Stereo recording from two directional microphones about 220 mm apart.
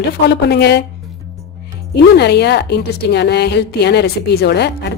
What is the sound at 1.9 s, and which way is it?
Speech, 50° left (ahead or behind).